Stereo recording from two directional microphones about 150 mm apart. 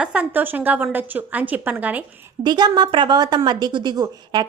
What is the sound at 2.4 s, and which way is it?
A woman's voice, 30° right (ahead or behind).